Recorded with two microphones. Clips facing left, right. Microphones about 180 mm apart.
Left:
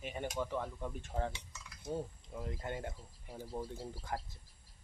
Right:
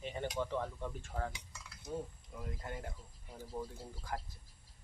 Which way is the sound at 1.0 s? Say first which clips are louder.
Left 2 dB; 25° left (ahead or behind).